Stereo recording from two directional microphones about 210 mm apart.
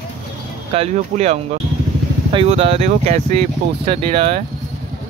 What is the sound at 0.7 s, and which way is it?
Speech, 35° right (ahead or behind).